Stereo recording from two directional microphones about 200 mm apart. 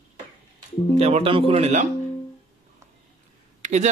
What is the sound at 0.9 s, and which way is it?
Speech, 30° right (ahead or behind).